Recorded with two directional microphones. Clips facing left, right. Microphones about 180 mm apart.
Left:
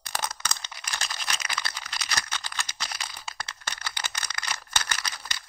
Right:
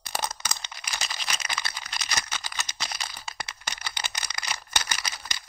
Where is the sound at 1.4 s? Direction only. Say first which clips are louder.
Even; 20° right (ahead or behind).